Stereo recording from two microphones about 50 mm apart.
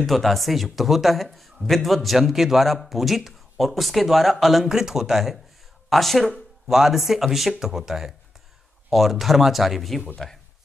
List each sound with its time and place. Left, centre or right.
0.0 s a man's voice: centre